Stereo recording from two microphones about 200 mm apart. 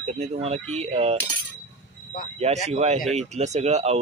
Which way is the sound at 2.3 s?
35° right (ahead or behind).